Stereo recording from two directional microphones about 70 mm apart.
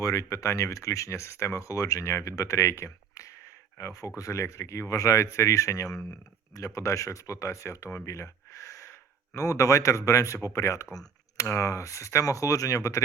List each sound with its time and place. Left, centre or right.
0.0 s speech: left
6.7 s speech: left
8.0 s gasp: left
10.1 s speech: left